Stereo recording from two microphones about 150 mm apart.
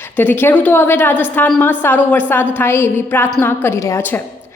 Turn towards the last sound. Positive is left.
turn(degrees=15)  # may be behind; listen again after turning